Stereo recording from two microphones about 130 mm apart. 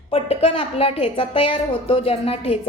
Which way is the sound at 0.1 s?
50° left (ahead or behind).